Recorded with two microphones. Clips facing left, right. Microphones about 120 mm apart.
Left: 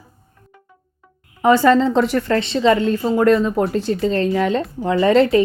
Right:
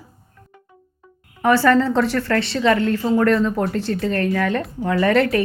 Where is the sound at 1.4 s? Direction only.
20° left (ahead or behind).